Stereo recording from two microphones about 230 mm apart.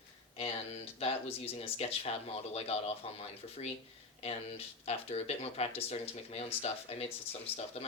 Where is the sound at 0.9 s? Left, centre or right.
Left.